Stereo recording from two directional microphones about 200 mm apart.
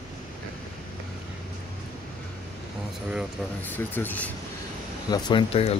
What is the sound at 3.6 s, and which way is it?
Speech, 10° left (ahead or behind).